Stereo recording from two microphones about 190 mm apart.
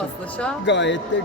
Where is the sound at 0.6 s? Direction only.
70° left (ahead or behind).